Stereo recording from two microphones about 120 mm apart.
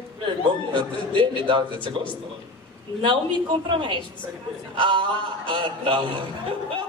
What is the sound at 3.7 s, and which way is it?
A woman's voice, 40° right (ahead or behind).